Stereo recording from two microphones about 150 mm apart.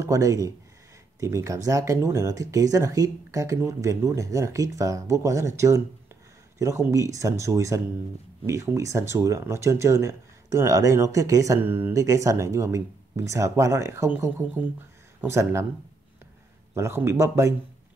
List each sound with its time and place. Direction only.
0.0 s speech: 20° right (ahead or behind)
6.6 s speech: 20° right (ahead or behind)
16.7 s speech: 15° right (ahead or behind)